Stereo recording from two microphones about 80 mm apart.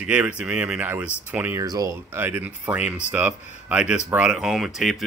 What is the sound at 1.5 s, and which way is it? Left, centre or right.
Speech, right.